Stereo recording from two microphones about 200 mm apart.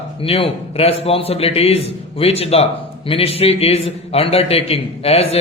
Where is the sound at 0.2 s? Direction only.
30° left (ahead or behind).